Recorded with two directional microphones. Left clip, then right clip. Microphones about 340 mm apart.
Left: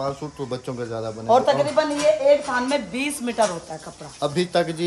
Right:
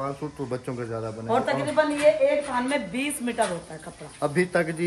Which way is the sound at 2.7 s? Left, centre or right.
Centre.